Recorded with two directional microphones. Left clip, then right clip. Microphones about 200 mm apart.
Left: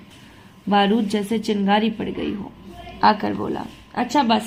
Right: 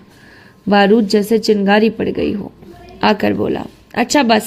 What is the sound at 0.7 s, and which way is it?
A woman's voice, 40° right (ahead or behind).